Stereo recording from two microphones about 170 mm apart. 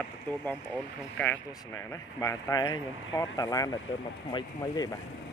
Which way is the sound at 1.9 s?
20° left (ahead or behind).